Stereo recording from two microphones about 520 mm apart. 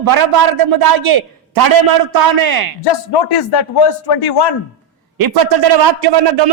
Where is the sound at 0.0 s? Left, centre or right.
Right.